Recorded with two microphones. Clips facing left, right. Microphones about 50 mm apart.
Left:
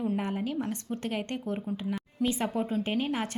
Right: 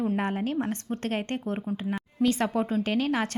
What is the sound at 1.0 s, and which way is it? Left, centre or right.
Speech, right.